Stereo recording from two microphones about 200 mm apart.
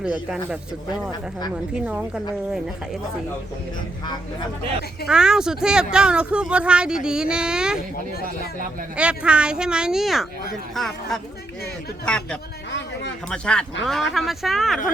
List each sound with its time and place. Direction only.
0.0 s speech: 5° right (ahead or behind)
1.7 s speech: 5° right (ahead or behind)
4.0 s speech: 20° left (ahead or behind)
5.0 s speech: 5° right (ahead or behind)
9.0 s speech: 5° right (ahead or behind)
12.7 s a sound: 60° left (ahead or behind)
13.3 s speech: 5° left (ahead or behind)